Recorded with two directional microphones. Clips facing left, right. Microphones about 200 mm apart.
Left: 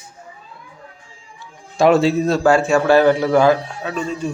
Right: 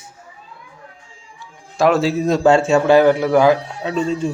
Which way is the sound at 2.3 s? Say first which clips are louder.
Right 4 dB; 20° right (ahead or behind).